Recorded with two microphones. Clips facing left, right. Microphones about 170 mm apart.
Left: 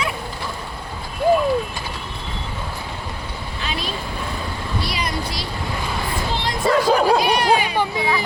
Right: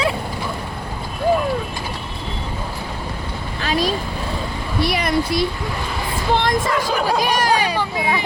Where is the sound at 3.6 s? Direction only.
40° right (ahead or behind).